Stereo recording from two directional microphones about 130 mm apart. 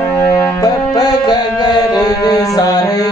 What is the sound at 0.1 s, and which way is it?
Music, 15° left (ahead or behind).